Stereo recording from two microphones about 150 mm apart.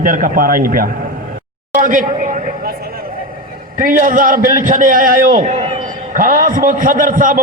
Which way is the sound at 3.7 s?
65° right (ahead or behind).